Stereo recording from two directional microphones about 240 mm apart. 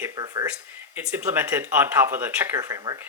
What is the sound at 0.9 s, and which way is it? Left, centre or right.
Speech, centre.